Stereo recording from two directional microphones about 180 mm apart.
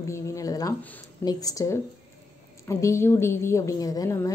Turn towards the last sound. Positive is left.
turn(degrees=15)  # may be behind; listen again after turning